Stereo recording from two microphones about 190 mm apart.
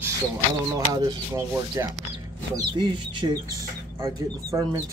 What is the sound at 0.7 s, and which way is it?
Speech, 20° right (ahead or behind).